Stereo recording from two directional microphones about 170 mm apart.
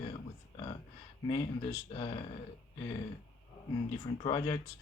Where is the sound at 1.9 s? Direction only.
30° left (ahead or behind).